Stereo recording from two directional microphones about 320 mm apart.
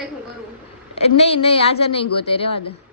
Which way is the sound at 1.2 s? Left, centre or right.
Centre.